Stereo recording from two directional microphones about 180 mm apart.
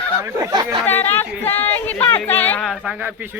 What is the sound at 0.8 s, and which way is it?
Speech, 10° left (ahead or behind).